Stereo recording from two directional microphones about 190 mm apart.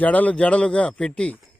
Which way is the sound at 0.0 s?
10° left (ahead or behind).